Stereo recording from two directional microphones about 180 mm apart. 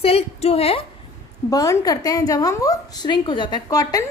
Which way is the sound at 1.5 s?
20° left (ahead or behind).